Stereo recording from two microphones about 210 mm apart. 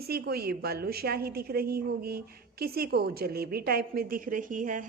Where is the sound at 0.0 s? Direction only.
45° right (ahead or behind).